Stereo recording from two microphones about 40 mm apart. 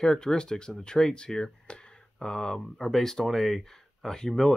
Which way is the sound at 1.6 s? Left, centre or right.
Left.